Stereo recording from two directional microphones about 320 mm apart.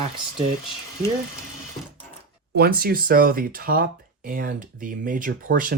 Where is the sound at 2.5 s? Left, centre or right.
Right.